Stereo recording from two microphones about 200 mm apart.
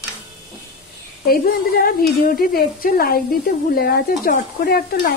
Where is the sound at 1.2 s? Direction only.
50° left (ahead or behind).